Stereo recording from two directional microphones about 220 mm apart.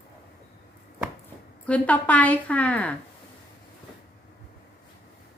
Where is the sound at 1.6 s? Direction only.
5° left (ahead or behind).